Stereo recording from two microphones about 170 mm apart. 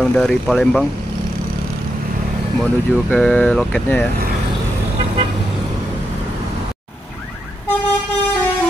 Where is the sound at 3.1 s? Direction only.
5° left (ahead or behind).